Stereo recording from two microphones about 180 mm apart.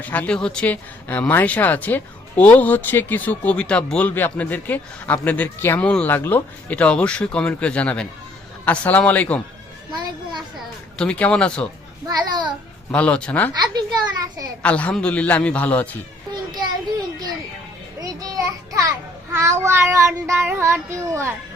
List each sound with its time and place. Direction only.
0.0 s speech: 10° left (ahead or behind)
9.9 s a child's voice: 25° right (ahead or behind)
10.9 s speech: 5° left (ahead or behind)
12.0 s a child's voice: 25° right (ahead or behind)
12.9 s speech: 5° left (ahead or behind)
13.5 s a child's voice: 20° right (ahead or behind)
14.6 s speech: 5° left (ahead or behind)
18.0 s a sound: 20° right (ahead or behind)
19.3 s child singing: 15° right (ahead or behind)